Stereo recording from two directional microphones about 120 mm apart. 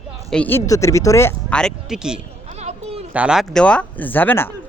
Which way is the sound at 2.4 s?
65° right (ahead or behind).